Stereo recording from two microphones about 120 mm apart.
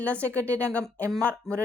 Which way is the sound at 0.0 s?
10° left (ahead or behind).